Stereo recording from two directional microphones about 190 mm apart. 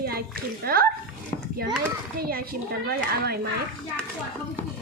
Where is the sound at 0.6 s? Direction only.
55° right (ahead or behind).